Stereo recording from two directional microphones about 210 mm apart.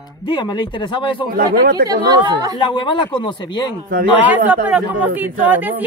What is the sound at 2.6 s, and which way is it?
Speech, 25° left (ahead or behind).